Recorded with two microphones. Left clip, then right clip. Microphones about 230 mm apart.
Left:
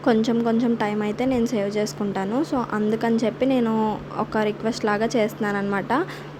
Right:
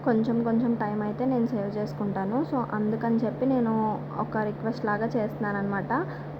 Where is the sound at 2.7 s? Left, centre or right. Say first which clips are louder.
Left 6 dB; left.